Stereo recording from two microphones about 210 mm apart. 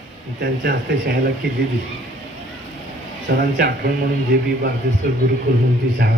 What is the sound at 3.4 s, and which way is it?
Speech, 45° right (ahead or behind).